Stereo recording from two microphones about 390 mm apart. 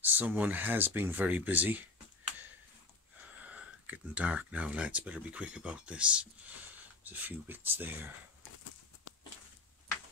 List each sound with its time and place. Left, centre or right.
0.0 s speech: centre
3.3 s speech: centre